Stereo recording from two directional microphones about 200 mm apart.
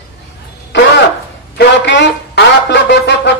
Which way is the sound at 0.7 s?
60° left (ahead or behind).